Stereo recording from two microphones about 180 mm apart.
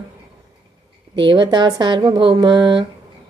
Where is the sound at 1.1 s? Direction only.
25° right (ahead or behind).